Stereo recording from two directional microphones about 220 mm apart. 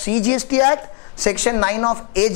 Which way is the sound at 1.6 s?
20° left (ahead or behind).